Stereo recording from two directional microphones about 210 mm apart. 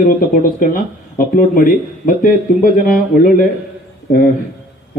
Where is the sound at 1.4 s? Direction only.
40° left (ahead or behind).